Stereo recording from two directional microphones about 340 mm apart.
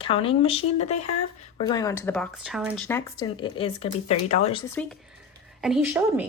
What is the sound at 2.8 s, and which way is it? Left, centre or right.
A woman's voice, centre.